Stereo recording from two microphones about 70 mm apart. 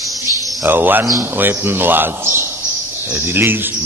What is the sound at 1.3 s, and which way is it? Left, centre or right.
A man's voice, right.